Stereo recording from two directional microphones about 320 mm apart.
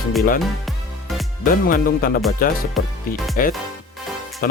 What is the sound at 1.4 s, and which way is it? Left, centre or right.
Speech, left.